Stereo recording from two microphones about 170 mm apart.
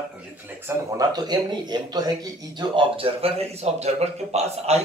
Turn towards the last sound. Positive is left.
turn(degrees=-40)  # may be behind; listen again after turning